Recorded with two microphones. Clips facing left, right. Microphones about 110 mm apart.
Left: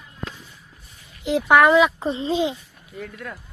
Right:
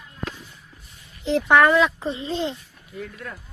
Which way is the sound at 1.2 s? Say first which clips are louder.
Left 1 dB; 5° left (ahead or behind).